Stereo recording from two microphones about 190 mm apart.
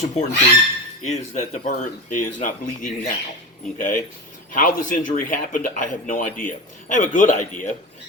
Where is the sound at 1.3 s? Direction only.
40° left (ahead or behind).